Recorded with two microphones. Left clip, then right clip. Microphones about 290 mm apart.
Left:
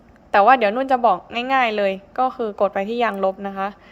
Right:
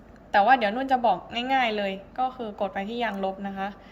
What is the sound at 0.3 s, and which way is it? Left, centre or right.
A woman's voice, centre.